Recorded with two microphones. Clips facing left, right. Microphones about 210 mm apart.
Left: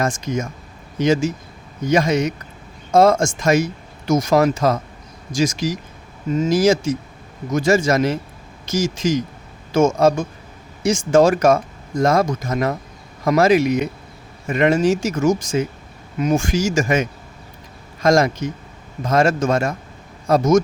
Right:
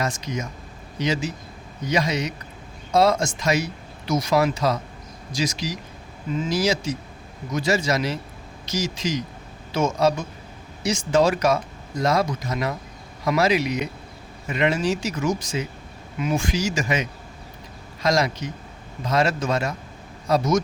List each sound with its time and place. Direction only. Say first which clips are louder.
0.0 s speech: left 6 dB; 50° left (ahead or behind)